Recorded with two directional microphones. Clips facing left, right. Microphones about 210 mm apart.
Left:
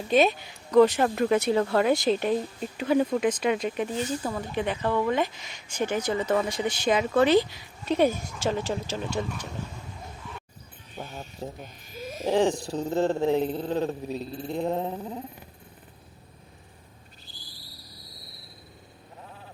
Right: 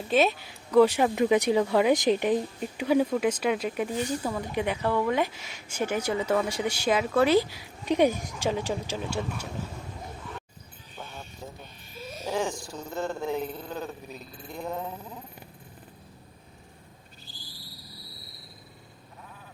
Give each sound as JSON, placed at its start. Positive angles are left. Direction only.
{"t": 0.1, "sound": "speech", "side_deg": 0}
{"t": 11.0, "sound": "mechanisms", "side_deg": 40}
{"t": 12.2, "sound": "speech", "side_deg": 35}